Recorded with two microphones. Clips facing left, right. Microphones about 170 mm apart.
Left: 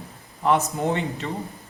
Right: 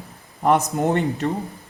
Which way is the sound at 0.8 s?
55° right (ahead or behind).